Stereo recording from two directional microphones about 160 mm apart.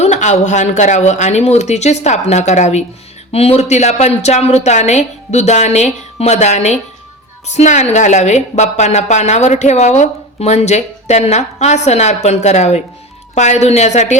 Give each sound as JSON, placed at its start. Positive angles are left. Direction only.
{"t": 0.0, "sound": "a woman's voice", "side_deg": 45}